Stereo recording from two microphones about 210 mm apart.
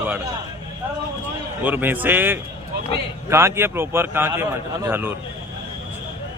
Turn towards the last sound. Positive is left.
turn(degrees=-10)  # may be behind; listen again after turning